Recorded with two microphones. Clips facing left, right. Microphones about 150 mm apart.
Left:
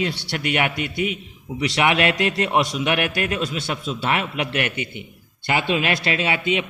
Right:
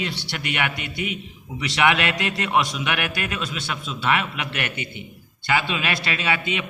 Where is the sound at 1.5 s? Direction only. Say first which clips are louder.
Left 1 dB; 30° left (ahead or behind).